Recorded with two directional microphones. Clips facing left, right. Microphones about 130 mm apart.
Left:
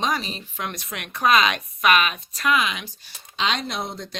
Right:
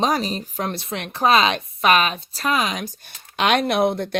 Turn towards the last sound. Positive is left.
turn(degrees=-60)  # may be behind; listen again after turning